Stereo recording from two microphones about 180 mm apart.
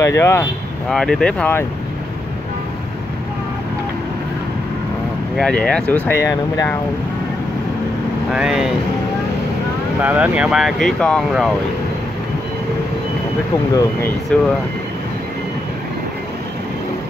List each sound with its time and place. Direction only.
0.0 s speech: 15° left (ahead or behind)
0.8 s speech: centre (ahead or behind)
5.3 s speech: 5° left (ahead or behind)
8.3 s speech: 5° right (ahead or behind)
10.0 s speech: 10° right (ahead or behind)
14.3 s speech: 5° left (ahead or behind)